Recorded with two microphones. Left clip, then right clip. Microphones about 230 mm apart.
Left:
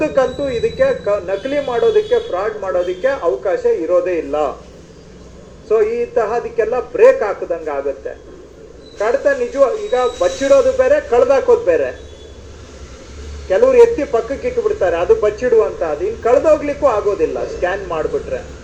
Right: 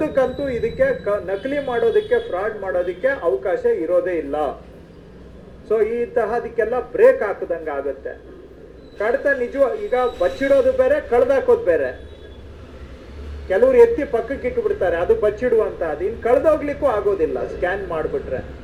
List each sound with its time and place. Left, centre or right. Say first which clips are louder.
0.0 s speech: left 4 dB; right
5.6 s speech: left 4 dB; right
9.0 s speech: left 4 dB; right
13.5 s speech: left 3 dB; right